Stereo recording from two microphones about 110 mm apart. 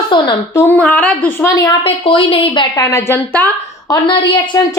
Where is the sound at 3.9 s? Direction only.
50° left (ahead or behind).